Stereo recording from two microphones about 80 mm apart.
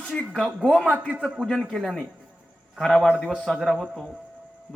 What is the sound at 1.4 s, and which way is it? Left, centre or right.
A man's voice, centre.